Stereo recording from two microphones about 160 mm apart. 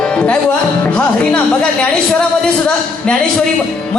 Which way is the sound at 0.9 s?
10° left (ahead or behind).